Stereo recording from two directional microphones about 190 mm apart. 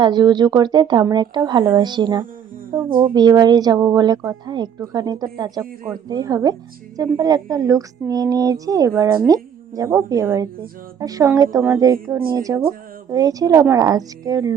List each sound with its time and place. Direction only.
0.0 s a woman's voice: 20° right (ahead or behind)
2.7 s a woman's voice: 15° right (ahead or behind)